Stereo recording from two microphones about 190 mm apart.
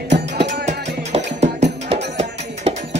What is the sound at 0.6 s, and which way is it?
Music, 35° right (ahead or behind).